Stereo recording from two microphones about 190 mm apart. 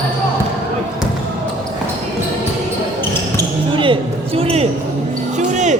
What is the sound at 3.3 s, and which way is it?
Basketball bounce, 25° right (ahead or behind).